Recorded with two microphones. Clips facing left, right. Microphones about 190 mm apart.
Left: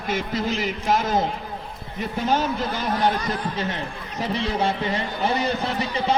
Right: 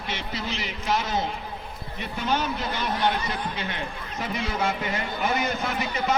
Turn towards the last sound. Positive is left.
turn(degrees=30)  # may be behind; listen again after turning